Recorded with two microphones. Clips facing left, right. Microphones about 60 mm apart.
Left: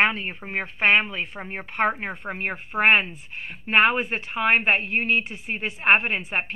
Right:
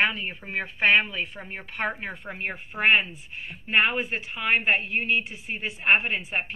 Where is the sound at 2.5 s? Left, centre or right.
Left.